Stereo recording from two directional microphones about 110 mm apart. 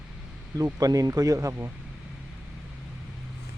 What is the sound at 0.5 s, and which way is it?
Speech, 35° right (ahead or behind).